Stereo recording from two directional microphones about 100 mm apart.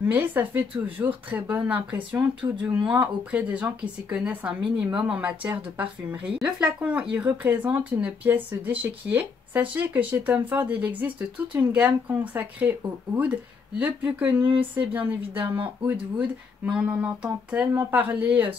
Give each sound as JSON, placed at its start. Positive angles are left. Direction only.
{"t": 0.1, "sound": "speech", "side_deg": -15}